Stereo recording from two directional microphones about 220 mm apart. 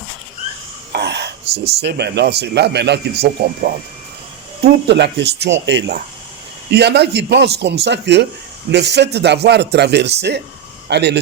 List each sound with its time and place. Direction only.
0.9 s whispering: 50° right (ahead or behind)
1.5 s speech: 25° right (ahead or behind)
1.8 s a man's voice: 50° right (ahead or behind)